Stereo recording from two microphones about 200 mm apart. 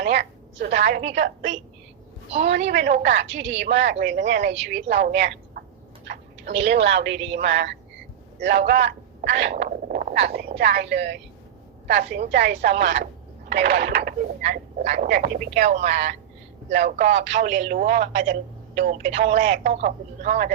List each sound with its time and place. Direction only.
0.0 s a sound: 60° right (ahead or behind)
1.0 s a woman's voice: 65° right (ahead or behind)
8.4 s a man's voice: 55° right (ahead or behind)
9.6 s a woman's voice: 40° right (ahead or behind)